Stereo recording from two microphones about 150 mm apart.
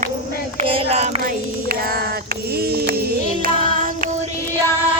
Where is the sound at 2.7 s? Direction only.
85° right.